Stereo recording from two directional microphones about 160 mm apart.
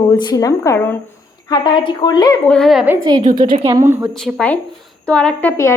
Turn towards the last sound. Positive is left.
turn(degrees=15)  # may be behind; listen again after turning